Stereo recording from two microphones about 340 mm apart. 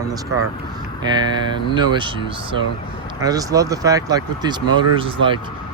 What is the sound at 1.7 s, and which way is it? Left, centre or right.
Speech, centre.